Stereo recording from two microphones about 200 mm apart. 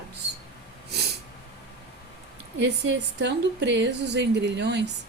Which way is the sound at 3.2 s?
60° right (ahead or behind).